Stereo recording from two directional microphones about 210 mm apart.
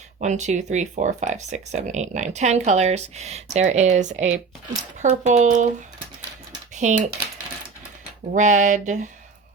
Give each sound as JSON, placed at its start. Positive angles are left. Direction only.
{"t": 0.2, "sound": "speech", "side_deg": -35}
{"t": 6.8, "sound": "speech", "side_deg": -35}
{"t": 8.3, "sound": "speech", "side_deg": -35}